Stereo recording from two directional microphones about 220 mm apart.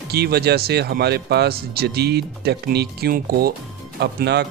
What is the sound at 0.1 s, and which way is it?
Speech, 45° right (ahead or behind).